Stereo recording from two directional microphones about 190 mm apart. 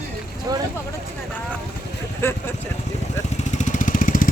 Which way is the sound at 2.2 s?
15° left (ahead or behind).